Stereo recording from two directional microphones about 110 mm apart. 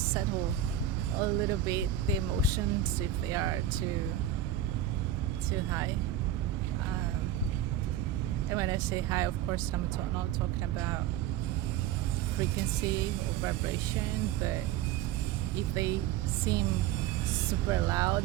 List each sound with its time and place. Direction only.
1.2 s speech: 30° right (ahead or behind)
5.5 s speech: 30° right (ahead or behind)
8.4 s speech: 30° right (ahead or behind)
12.4 s speech: 30° right (ahead or behind)
17.5 s speech: 30° right (ahead or behind)